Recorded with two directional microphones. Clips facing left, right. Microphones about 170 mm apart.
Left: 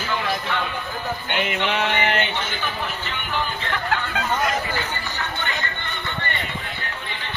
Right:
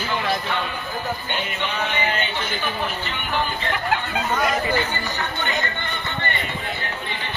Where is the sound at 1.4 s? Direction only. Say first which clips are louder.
Left 4 dB; 75° left (ahead or behind).